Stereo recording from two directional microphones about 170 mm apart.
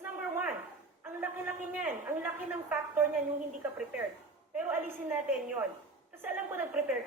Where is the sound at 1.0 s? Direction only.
10° right (ahead or behind).